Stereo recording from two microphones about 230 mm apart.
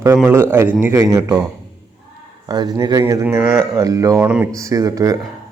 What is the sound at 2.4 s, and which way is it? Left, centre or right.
Speech, centre.